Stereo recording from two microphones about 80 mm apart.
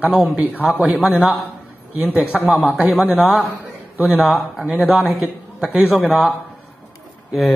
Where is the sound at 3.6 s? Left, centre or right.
Centre.